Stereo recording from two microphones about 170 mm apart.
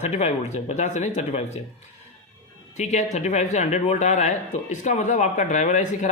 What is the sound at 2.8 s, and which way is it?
Speech, 40° left (ahead or behind).